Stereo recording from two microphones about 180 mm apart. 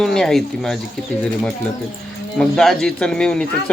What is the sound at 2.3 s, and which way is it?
Speech, centre (ahead or behind).